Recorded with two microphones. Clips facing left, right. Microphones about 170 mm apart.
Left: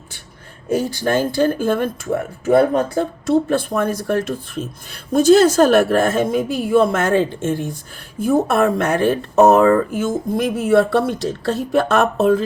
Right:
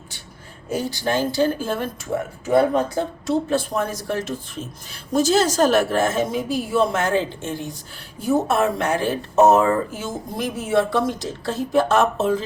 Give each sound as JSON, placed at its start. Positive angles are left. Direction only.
{"t": 0.7, "sound": "speech", "side_deg": 50}
{"t": 3.2, "sound": "speech", "side_deg": 55}